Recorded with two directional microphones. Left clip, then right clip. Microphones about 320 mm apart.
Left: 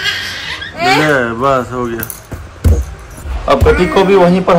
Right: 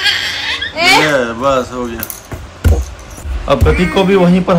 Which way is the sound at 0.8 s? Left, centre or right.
Centre.